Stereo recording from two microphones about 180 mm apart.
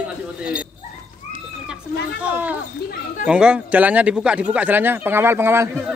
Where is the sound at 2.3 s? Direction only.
10° right (ahead or behind).